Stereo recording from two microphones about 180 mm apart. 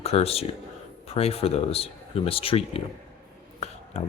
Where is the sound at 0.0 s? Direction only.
35° left (ahead or behind).